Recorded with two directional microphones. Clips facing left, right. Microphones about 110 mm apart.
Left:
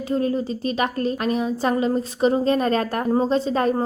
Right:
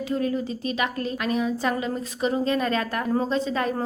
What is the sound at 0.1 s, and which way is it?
A woman's voice, 35° left (ahead or behind).